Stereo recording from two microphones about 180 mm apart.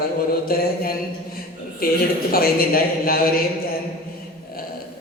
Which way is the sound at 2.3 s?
55° left (ahead or behind).